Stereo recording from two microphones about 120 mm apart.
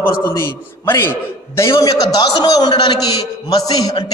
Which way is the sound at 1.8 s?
35° left (ahead or behind).